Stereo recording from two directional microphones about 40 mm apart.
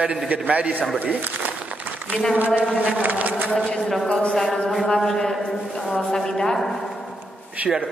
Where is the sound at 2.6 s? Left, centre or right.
Right.